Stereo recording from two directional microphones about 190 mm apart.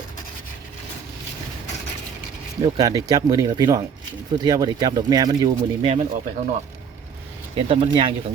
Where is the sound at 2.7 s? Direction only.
20° right (ahead or behind).